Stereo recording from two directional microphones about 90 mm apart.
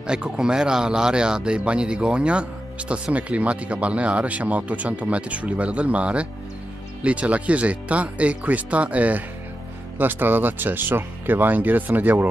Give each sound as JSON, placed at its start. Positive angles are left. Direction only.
{"t": 0.0, "sound": "speech", "side_deg": -10}